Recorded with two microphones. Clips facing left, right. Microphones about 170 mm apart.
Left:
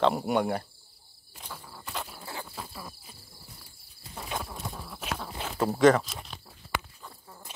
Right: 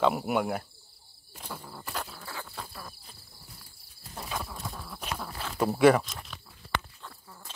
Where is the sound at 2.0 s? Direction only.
25° left (ahead or behind).